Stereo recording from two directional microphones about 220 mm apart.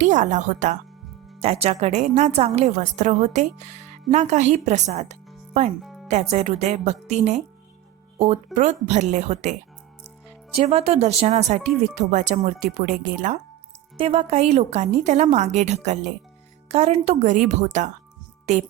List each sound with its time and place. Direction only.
0.0 s a woman's voice: 35° right (ahead or behind)
5.8 s music: centre (ahead or behind)
6.3 s a woman's voice: 30° right (ahead or behind)
8.5 s a woman's voice: 30° right (ahead or behind)